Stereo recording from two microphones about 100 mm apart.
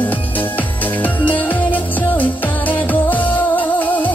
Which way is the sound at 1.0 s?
15° left (ahead or behind).